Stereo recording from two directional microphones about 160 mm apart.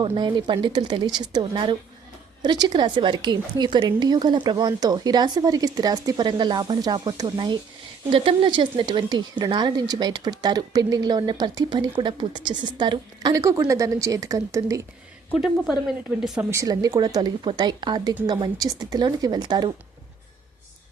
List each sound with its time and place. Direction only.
0.0 s a woman's voice: 30° right (ahead or behind)
15.3 s speech: 5° right (ahead or behind)
16.5 s a woman's voice: 20° right (ahead or behind)